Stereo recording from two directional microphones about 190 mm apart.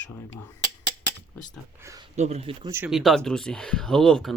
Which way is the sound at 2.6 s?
15° right (ahead or behind).